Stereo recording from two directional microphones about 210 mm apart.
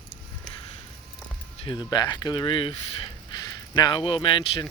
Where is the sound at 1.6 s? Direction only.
20° left (ahead or behind).